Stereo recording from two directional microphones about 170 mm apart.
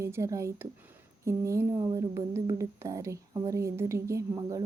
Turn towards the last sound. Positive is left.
turn(degrees=-20)  # may be behind; listen again after turning